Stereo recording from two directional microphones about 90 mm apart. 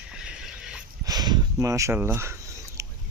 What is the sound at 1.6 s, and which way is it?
Speech, 35° right (ahead or behind).